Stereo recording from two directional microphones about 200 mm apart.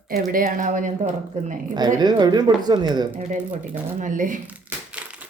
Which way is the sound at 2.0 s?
20° right (ahead or behind).